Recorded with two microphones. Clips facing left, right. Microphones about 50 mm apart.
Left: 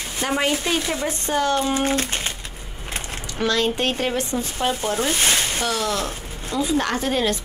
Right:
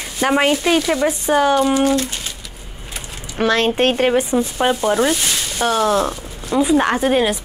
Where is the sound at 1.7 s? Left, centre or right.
Left.